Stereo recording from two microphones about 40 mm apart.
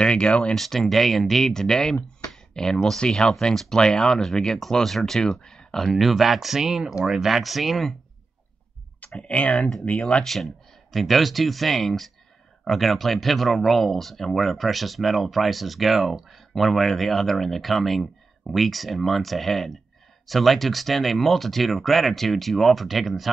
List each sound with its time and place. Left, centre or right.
0.0 s speech: left
0.6 s speech: centre
5.4 s a sound: centre
5.9 s speech: centre
7.2 s speech: centre
9.1 s speech: left
10.2 s speech: centre